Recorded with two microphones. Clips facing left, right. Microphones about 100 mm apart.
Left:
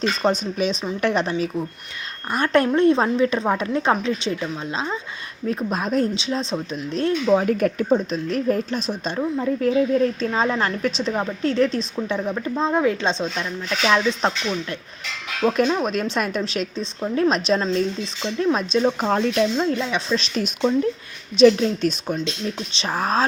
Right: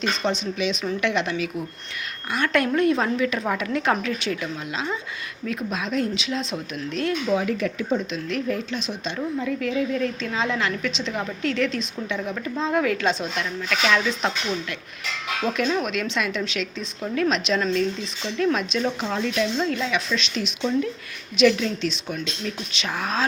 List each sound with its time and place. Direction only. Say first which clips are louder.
0.2 s a woman's voice: left 4 dB; 40° left (ahead or behind)
7.4 s a woman's voice: left 5 dB; 45° left (ahead or behind)
18.9 s speech: left 5 dB; 45° left (ahead or behind)
19.5 s speech: left 2 dB; 30° left (ahead or behind)
22.1 s speech: left 4 dB; 30° left (ahead or behind)